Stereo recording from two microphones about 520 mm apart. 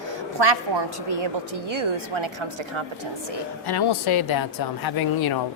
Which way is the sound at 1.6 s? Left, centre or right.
Right.